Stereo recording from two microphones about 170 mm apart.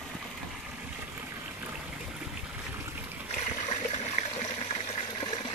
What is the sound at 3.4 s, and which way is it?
Water, 40° left (ahead or behind).